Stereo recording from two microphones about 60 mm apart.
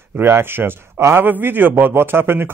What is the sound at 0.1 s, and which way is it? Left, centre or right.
A man's voice, right.